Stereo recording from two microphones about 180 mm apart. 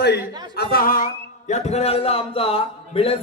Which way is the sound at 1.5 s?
35° left (ahead or behind).